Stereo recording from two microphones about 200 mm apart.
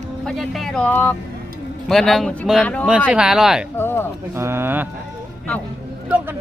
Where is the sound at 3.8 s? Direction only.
10° left (ahead or behind).